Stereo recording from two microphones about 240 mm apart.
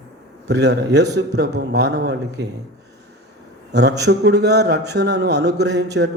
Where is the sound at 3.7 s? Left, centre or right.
Right.